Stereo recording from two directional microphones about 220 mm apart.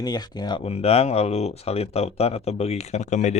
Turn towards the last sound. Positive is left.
turn(degrees=30)  # may be behind; listen again after turning